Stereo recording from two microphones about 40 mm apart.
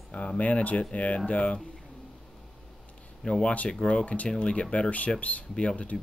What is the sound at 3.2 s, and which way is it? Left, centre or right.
Speech, left.